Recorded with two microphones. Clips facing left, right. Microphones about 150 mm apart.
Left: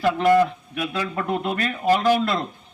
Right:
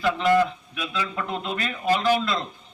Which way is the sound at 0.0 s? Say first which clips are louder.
Left 3 dB; 55° left (ahead or behind).